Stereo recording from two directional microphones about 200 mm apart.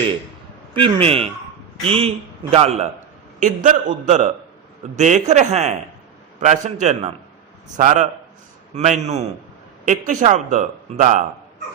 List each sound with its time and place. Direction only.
0.7 s a man's voice: 25° right (ahead or behind)